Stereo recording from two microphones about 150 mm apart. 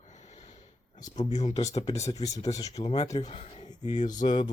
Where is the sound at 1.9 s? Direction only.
20° left (ahead or behind).